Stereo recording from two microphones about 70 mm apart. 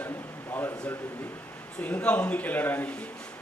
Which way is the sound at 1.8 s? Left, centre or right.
Centre.